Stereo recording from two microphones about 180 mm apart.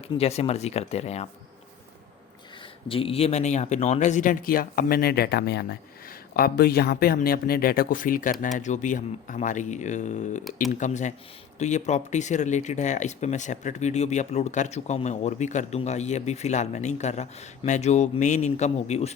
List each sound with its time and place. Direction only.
0.2 s speech: 35° left (ahead or behind)
2.9 s speech: 30° left (ahead or behind)